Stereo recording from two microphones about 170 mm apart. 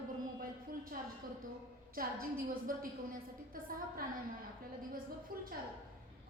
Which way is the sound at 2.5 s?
55° right (ahead or behind).